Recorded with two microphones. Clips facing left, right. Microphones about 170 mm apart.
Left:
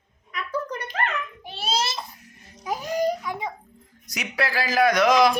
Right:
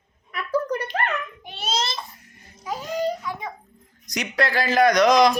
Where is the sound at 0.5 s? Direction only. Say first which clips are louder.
Right 6 dB; 35° right (ahead or behind).